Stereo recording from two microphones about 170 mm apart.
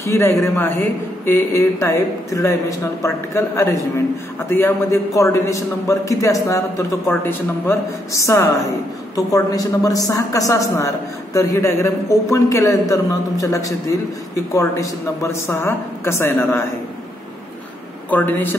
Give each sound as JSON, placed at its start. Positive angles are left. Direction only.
{"t": 0.0, "sound": "a man's voice", "side_deg": 15}
{"t": 18.1, "sound": "a man's voice", "side_deg": 10}